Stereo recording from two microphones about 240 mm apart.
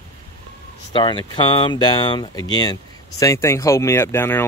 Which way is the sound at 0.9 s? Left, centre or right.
Centre.